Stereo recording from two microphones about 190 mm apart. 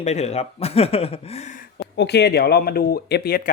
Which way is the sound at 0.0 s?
35° left (ahead or behind).